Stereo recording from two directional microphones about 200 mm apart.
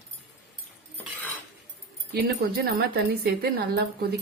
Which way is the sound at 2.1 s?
50° right (ahead or behind).